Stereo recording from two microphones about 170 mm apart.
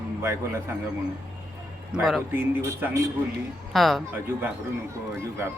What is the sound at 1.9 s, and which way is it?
Speech, centre (ahead or behind).